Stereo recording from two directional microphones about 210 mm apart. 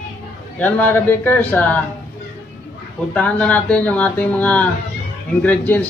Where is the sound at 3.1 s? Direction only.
5° left (ahead or behind).